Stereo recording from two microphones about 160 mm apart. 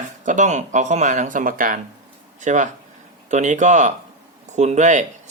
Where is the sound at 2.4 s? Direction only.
50° right (ahead or behind).